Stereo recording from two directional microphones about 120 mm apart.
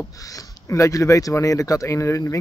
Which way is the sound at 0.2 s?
30° left (ahead or behind).